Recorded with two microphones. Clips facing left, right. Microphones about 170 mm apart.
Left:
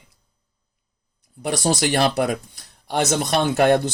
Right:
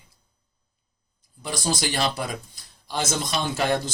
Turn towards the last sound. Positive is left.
turn(degrees=60)  # may be behind; listen again after turning